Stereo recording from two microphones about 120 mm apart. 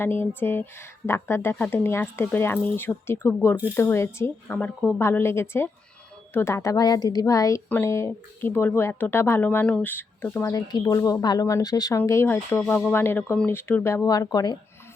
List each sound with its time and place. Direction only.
0.0 s speech: 20° left (ahead or behind)
4.9 s speech: 20° left (ahead or behind)